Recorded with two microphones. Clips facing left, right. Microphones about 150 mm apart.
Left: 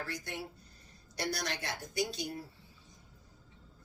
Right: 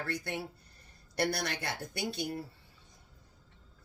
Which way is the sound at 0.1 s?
60° right (ahead or behind).